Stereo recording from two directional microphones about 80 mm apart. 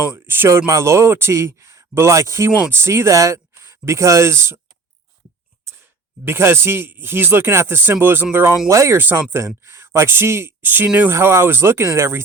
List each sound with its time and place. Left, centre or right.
0.1 s speech: right
5.6 s speech: right
8.6 s speech: right
9.0 s speech: right
11.1 s speech: right